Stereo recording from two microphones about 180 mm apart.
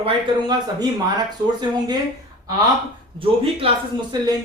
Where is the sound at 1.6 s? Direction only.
20° right (ahead or behind).